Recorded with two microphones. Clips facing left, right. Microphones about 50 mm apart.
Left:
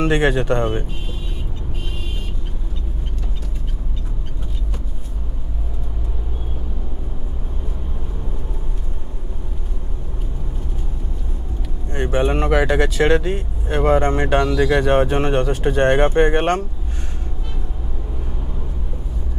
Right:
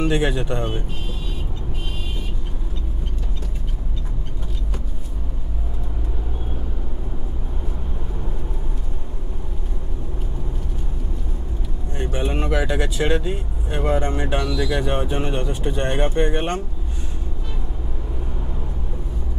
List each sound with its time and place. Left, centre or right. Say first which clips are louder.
0.0 s speech: left 4 dB; left
11.9 s speech: left 6 dB; left
16.1 s speech: left 6 dB; left